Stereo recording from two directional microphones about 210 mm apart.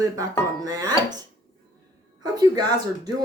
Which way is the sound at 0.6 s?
15° right (ahead or behind).